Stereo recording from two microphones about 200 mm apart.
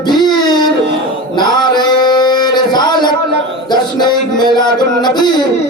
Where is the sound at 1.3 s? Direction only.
20° left (ahead or behind).